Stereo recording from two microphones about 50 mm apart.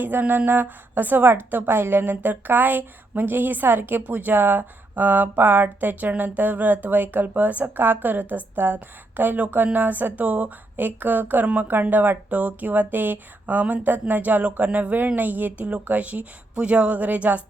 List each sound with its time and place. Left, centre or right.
0.0 s a woman's voice: right